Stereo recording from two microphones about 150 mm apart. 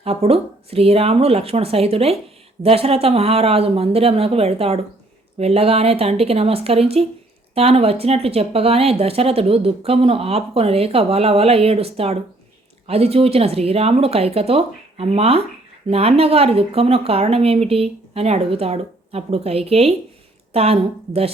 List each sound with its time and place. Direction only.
0.0 s speech: 40° right (ahead or behind)